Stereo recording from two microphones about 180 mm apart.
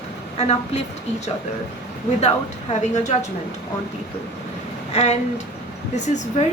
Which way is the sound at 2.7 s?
40° left (ahead or behind).